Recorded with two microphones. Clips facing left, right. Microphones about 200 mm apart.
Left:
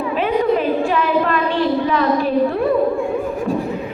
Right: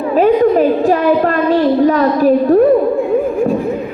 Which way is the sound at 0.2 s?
40° right (ahead or behind).